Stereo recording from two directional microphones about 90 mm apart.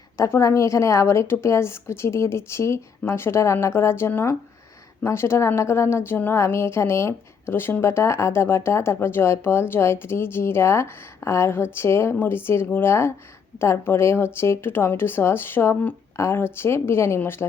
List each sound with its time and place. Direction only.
0.2 s a woman's voice: 35° left (ahead or behind)